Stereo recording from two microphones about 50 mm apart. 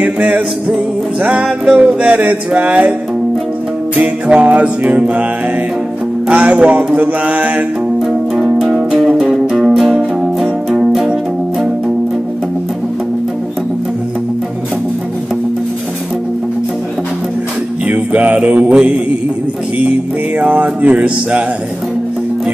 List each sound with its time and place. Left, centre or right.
0.0 s music: right
1.8 s music: right
3.9 s music: right
6.2 s music: right
8.7 s music: centre
17.8 s music: right
20.3 s music: right